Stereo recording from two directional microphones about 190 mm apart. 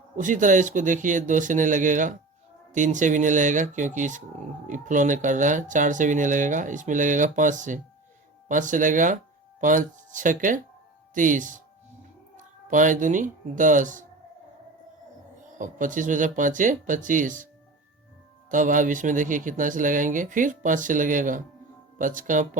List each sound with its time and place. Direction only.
0.2 s speech: 40° right (ahead or behind)
15.5 s speech: 40° right (ahead or behind)
18.5 s speech: 45° right (ahead or behind)